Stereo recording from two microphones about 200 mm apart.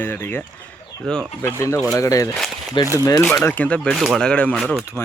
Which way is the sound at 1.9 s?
15° left (ahead or behind).